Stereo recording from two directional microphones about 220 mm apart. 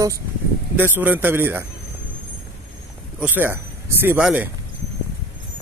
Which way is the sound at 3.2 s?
10° right (ahead or behind).